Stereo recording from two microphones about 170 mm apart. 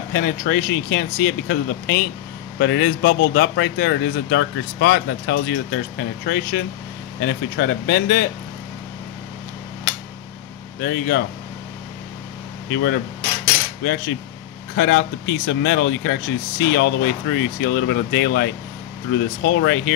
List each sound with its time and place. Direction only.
0.1 s speech: 65° left (ahead or behind)
2.6 s speech: 85° left; by 8.3 s 65° left (ahead or behind)
10.8 s speech: 70° left (ahead or behind)
12.6 s speech: 90° left
14.8 s speech: 85° left